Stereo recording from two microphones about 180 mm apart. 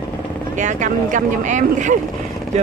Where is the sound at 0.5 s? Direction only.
45° right (ahead or behind).